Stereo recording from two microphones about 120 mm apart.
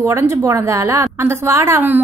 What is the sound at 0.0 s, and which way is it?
A woman's voice, 20° right (ahead or behind).